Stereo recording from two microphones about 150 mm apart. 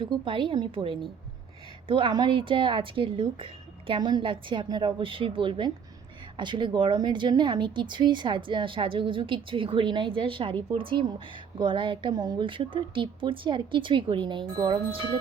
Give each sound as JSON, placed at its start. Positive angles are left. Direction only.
{"t": 0.0, "sound": "speech", "side_deg": -35}